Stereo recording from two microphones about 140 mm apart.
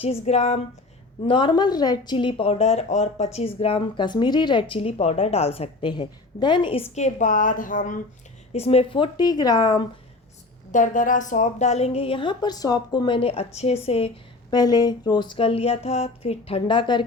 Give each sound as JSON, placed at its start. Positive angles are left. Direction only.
{"t": 0.0, "sound": "a woman's voice", "side_deg": 50}
{"t": 1.3, "sound": "speech", "side_deg": 35}
{"t": 6.9, "sound": "a woman's voice", "side_deg": 60}
{"t": 8.5, "sound": "speech", "side_deg": 45}
{"t": 10.7, "sound": "a woman's voice", "side_deg": 70}
{"t": 14.5, "sound": "speech", "side_deg": 30}